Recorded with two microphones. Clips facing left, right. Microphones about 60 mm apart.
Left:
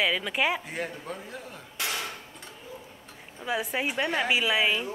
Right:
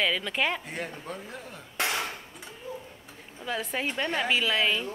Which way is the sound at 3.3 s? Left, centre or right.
Centre.